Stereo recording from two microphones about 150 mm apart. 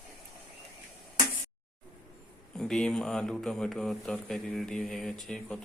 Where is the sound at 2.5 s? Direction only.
5° left (ahead or behind).